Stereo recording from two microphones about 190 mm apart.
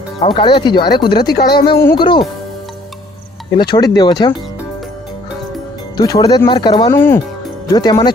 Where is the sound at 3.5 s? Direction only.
25° left (ahead or behind).